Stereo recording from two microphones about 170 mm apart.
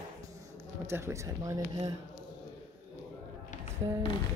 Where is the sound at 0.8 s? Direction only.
15° right (ahead or behind).